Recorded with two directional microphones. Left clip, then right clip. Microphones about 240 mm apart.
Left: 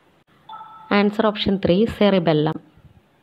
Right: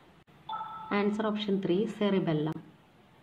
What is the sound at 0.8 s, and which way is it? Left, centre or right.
A woman's voice, left.